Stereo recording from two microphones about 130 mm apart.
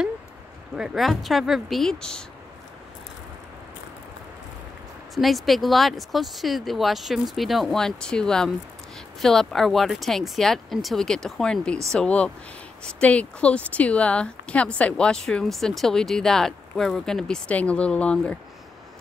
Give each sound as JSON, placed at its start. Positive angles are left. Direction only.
{"t": 0.7, "sound": "speech", "side_deg": -5}
{"t": 5.1, "sound": "speech", "side_deg": 0}